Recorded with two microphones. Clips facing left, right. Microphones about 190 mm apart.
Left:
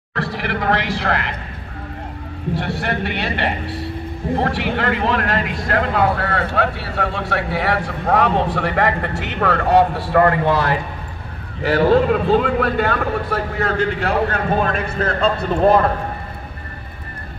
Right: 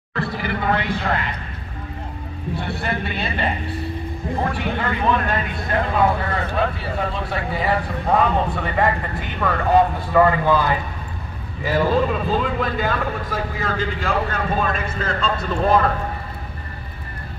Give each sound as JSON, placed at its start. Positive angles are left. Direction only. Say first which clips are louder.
{"t": 0.1, "sound": "speech", "louder": "left 1 dB", "side_deg": 80}
{"t": 2.5, "sound": "a man's voice", "louder": "left 3 dB", "side_deg": 85}